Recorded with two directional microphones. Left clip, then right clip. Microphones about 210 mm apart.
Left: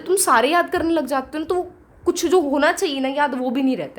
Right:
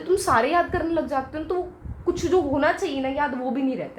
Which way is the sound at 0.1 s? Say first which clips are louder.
Left 4 dB; 40° left (ahead or behind).